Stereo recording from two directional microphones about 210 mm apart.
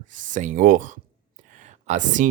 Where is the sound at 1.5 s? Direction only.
35° right (ahead or behind).